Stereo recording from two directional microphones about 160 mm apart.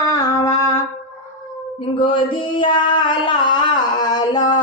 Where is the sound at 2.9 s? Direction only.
30° left (ahead or behind).